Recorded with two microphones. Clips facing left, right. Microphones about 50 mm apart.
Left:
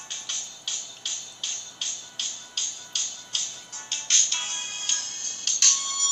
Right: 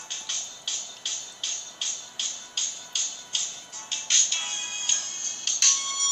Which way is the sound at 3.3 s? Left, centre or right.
Centre.